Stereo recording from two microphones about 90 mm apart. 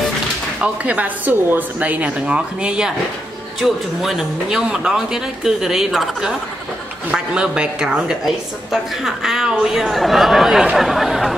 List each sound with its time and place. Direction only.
0.6 s speech: 15° right (ahead or behind)